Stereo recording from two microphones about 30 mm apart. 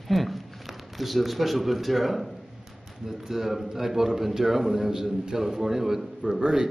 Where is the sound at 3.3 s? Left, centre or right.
Centre.